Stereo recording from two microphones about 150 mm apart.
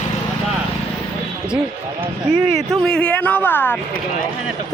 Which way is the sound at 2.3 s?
5° right (ahead or behind).